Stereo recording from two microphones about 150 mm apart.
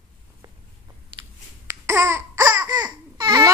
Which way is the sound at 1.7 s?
15° right (ahead or behind).